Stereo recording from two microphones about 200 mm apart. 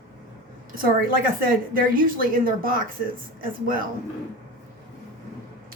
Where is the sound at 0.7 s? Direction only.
45° right (ahead or behind).